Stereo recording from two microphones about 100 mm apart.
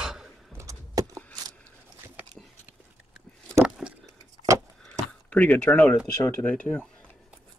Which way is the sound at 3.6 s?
10° right (ahead or behind).